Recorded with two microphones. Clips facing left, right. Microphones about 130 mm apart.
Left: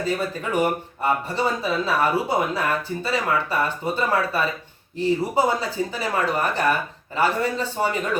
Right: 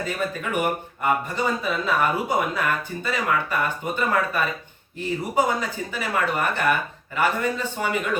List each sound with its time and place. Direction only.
0.5 s speech: 30° left (ahead or behind)